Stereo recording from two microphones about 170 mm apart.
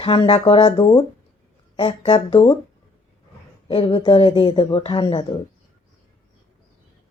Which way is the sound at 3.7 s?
30° left (ahead or behind).